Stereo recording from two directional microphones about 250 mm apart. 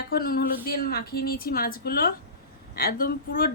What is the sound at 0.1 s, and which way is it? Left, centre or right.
A woman's voice, left.